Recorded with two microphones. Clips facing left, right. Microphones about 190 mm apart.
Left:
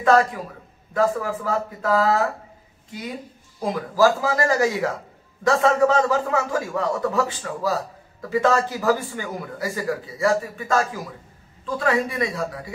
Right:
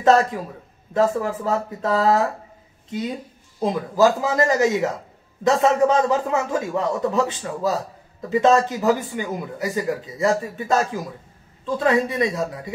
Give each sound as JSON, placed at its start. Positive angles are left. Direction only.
{"t": 0.0, "sound": "a man's voice", "side_deg": -25}
{"t": 3.5, "sound": "a man's voice", "side_deg": -20}